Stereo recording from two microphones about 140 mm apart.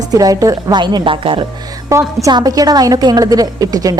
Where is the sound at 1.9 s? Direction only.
25° right (ahead or behind).